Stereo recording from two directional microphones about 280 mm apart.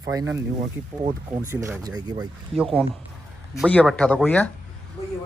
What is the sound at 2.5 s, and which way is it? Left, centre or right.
Speech, centre.